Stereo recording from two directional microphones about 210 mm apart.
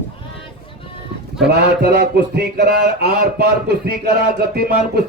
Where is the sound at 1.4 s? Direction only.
50° right (ahead or behind).